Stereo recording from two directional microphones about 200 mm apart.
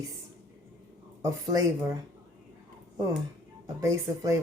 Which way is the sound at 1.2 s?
20° right (ahead or behind).